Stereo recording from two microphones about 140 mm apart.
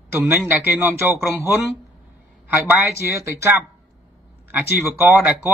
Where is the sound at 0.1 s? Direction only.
15° right (ahead or behind).